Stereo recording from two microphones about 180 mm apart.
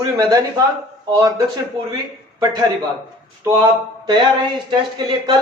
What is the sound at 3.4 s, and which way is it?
A man's voice, 25° right (ahead or behind).